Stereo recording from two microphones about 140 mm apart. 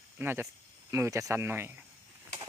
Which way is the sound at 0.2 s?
15° right (ahead or behind).